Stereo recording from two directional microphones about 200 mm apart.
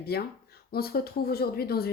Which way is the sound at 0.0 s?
50° left (ahead or behind).